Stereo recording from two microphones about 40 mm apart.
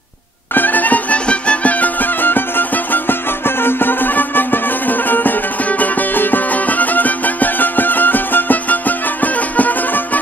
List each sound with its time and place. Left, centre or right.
0.6 s music: left
1.2 s music: left
2.2 s music: left